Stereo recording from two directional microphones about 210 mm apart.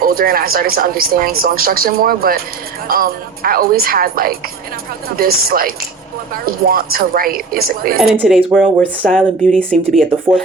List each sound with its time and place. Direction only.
0.0 s speech: 45° right (ahead or behind)
8.0 s a woman's voice: 5° right (ahead or behind)